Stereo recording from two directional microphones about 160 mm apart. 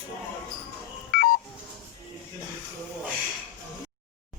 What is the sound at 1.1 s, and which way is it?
Telephone dialing, 60° left (ahead or behind).